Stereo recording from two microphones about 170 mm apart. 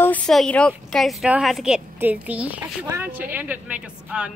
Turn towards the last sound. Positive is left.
turn(degrees=-5)  # may be behind; listen again after turning